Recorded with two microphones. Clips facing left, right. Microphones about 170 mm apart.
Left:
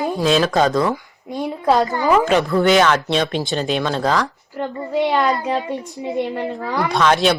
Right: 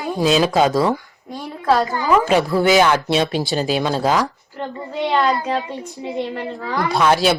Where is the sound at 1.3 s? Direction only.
20° left (ahead or behind).